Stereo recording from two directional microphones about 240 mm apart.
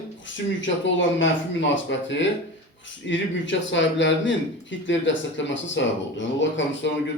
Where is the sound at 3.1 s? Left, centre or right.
Left.